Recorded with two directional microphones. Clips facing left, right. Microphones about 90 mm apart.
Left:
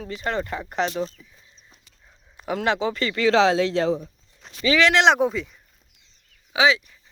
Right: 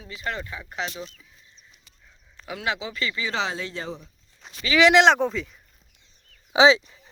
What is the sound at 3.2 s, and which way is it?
Speech, 90° left.